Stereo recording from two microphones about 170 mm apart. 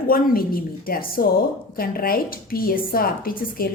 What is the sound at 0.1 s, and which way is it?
A woman's voice, 60° left (ahead or behind).